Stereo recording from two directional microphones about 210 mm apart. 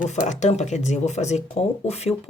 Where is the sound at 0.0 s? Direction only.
35° left (ahead or behind).